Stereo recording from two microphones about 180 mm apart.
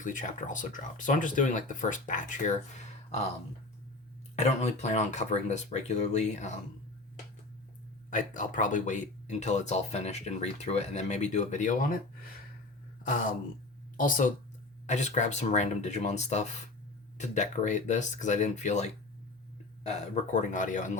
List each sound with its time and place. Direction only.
0.0 s speech: 45° left (ahead or behind)
4.4 s speech: 40° left (ahead or behind)
8.1 s speech: 45° left (ahead or behind)
13.9 s speech: 50° left (ahead or behind)